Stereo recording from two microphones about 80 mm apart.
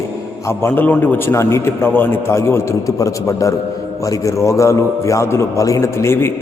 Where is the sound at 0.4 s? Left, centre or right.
Left.